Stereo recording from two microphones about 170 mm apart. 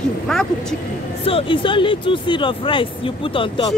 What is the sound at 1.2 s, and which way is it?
Speech, 30° left (ahead or behind).